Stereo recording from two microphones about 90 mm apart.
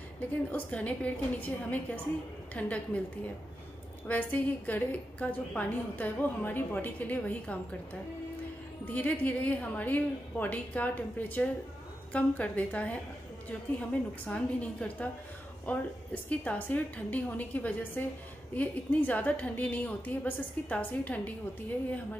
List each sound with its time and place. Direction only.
0.5 s a woman's voice: 15° left (ahead or behind)
4.1 s a woman's voice: 20° left (ahead or behind)
8.8 s a woman's voice: 20° left (ahead or behind)